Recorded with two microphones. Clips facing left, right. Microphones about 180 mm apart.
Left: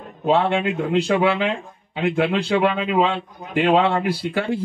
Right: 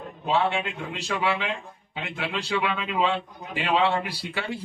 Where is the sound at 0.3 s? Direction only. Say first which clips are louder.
Left 6 dB; 55° left (ahead or behind).